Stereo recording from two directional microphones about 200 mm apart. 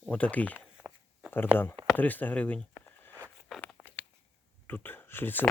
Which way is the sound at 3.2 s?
5° left (ahead or behind).